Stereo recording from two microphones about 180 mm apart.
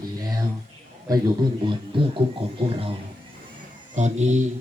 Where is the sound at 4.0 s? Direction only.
40° right (ahead or behind).